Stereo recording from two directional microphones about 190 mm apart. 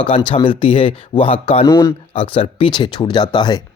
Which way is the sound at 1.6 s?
20° left (ahead or behind).